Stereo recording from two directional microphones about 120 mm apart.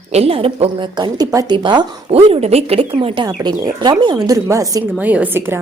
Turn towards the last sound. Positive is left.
turn(degrees=-20)  # may be behind; listen again after turning